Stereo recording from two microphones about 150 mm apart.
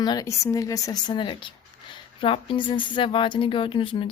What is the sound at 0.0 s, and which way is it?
A woman's voice, 25° left (ahead or behind).